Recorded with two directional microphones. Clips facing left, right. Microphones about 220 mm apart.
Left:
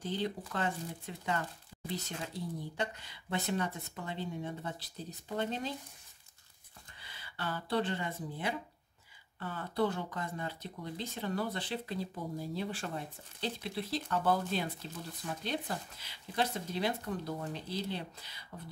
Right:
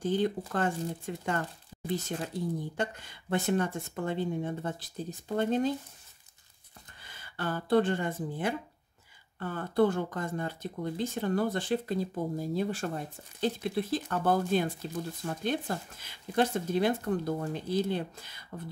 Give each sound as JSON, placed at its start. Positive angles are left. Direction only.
{"t": 0.0, "sound": "speech", "side_deg": -50}
{"t": 1.7, "sound": "a sound", "side_deg": -30}
{"t": 2.2, "sound": "speech", "side_deg": -50}
{"t": 7.0, "sound": "speech", "side_deg": -50}